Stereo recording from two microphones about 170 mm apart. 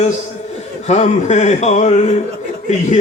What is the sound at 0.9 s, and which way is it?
Speech, 45° left (ahead or behind).